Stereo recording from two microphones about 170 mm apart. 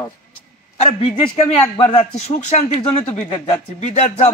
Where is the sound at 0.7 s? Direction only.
40° left (ahead or behind).